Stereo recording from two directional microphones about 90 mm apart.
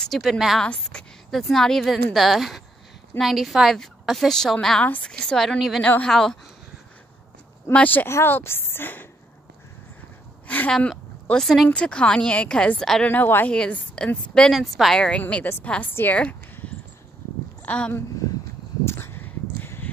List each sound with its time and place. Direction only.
0.0 s a woman's voice: centre (ahead or behind)
5.9 s speech: 15° left (ahead or behind)
7.7 s a woman's voice: 20° left (ahead or behind)
10.4 s a sound: 15° left (ahead or behind)
10.7 s speech: 10° left (ahead or behind)
11.7 s speech: 10° left (ahead or behind)
13.0 s a woman's voice: 20° left (ahead or behind)
13.5 s a woman's voice: 10° left (ahead or behind)
16.2 s a sound: 15° left (ahead or behind)
17.6 s speech: 15° left (ahead or behind)
18.9 s a sound: 25° left (ahead or behind)